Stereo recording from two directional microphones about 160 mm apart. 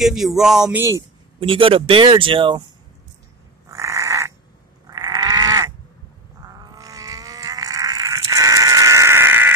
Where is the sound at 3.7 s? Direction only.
20° right (ahead or behind).